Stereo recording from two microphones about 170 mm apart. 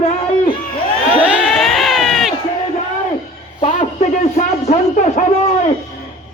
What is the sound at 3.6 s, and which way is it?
A man's voice, 40° left (ahead or behind).